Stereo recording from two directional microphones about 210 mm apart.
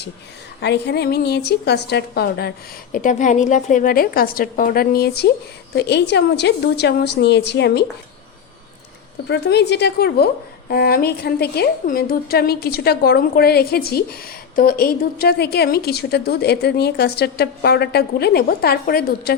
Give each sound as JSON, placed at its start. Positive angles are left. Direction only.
{"t": 0.6, "sound": "a woman's voice", "side_deg": 55}
{"t": 2.9, "sound": "a woman's voice", "side_deg": 35}
{"t": 9.3, "sound": "a woman's voice", "side_deg": 55}